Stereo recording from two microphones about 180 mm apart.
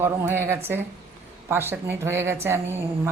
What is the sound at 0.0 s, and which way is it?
A woman's voice, 10° right (ahead or behind).